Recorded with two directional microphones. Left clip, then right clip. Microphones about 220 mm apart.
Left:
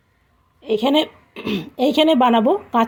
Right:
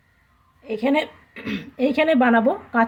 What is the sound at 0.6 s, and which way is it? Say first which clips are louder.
A woman's voice: left 4 dB; 30° left (ahead or behind).